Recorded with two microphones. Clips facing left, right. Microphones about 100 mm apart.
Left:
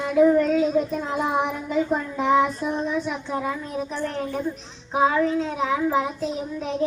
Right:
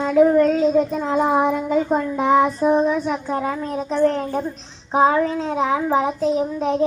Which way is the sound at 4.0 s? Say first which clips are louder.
Right 11 dB; 40° right (ahead or behind).